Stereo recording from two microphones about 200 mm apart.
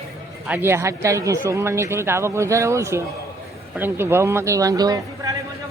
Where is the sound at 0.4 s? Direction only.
10° right (ahead or behind).